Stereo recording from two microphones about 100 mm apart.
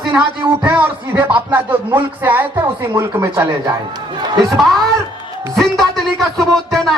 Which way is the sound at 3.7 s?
45° right (ahead or behind).